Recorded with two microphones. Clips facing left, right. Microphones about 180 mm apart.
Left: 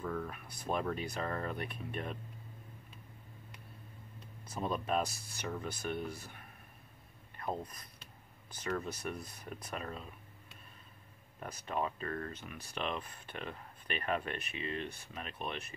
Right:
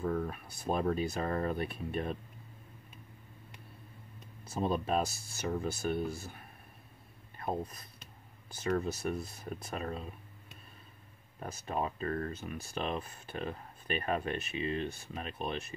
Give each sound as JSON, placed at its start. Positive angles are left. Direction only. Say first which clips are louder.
{"t": 0.0, "sound": "speech", "louder": "right 5 dB", "side_deg": -30}
{"t": 4.5, "sound": "speech", "louder": "right 4 dB", "side_deg": -30}
{"t": 11.3, "sound": "speech", "louder": "right 2 dB", "side_deg": -30}